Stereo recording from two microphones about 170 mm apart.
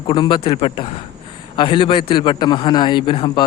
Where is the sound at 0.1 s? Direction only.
25° left (ahead or behind).